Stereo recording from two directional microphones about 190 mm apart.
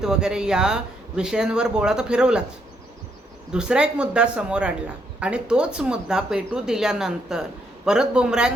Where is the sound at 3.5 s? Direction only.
5° right (ahead or behind).